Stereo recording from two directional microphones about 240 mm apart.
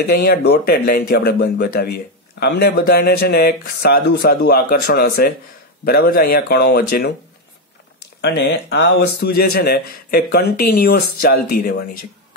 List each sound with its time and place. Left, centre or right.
0.2 s speech: left
8.2 s speech: left